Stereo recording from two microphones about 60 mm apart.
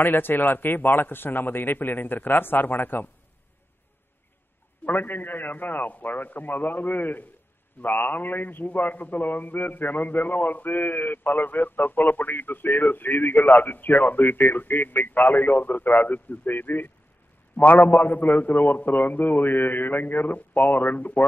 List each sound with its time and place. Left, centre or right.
0.0 s a man's voice: left
4.8 s a man's voice: left